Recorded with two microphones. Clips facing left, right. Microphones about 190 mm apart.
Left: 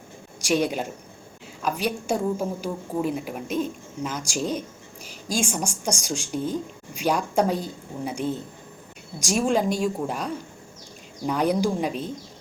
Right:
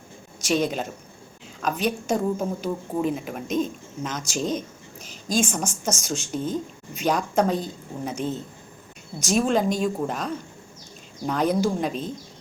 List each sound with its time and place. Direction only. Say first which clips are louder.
0.4 s speech: even; 10° left (ahead or behind)